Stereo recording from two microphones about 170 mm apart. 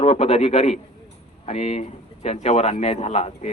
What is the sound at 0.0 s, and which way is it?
A man's voice, 40° left (ahead or behind).